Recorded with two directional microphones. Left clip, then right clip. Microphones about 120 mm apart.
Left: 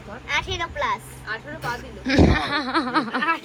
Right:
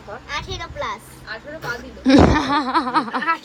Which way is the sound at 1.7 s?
45° right (ahead or behind).